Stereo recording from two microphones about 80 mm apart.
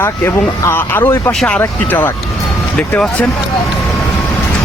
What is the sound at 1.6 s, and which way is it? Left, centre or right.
Speech, left.